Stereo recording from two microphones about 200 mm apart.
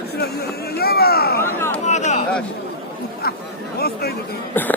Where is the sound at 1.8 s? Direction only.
35° left (ahead or behind).